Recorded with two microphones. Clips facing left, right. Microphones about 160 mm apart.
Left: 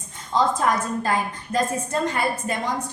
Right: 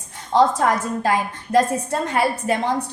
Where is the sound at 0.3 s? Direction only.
80° right.